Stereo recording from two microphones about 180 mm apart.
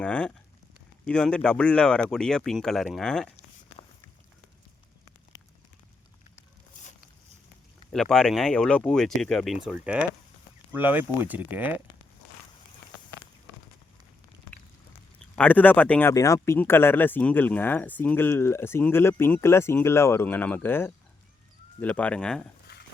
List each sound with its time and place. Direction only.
0.0 s speech: 5° left (ahead or behind)
7.9 s speech: 5° left (ahead or behind)
15.4 s speech: 10° left (ahead or behind)
22.7 s dog: 65° left (ahead or behind)